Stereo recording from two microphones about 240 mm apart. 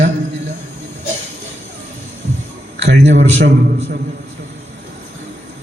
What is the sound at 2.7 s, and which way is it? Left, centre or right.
Speech, right.